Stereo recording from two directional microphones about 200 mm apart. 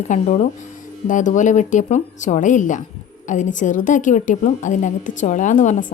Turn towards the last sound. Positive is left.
turn(degrees=40)  # may be behind; listen again after turning